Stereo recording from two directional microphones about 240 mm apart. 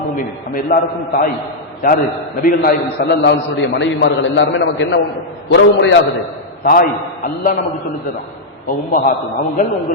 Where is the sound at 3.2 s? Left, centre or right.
Left.